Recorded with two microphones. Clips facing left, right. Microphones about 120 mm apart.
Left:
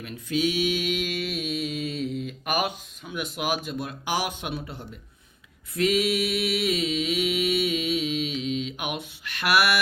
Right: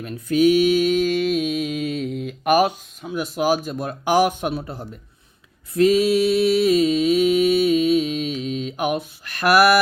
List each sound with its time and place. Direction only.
0.0 s mantra: 50° right (ahead or behind)